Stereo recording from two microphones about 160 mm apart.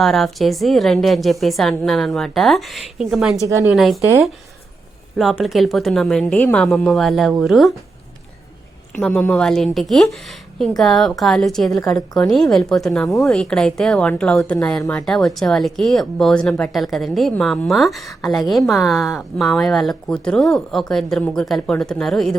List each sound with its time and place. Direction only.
0.0 s a woman's voice: centre (ahead or behind)
3.4 s a woman's voice: 20° right (ahead or behind)
3.7 s a woman's voice: centre (ahead or behind)
5.1 s a woman's voice: centre (ahead or behind)
9.0 s a woman's voice: 5° left (ahead or behind)
11.7 s a woman's voice: 20° left (ahead or behind)
12.3 s a woman's voice: centre (ahead or behind)